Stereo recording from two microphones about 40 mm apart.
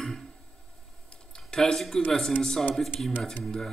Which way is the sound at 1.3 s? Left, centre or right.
Centre.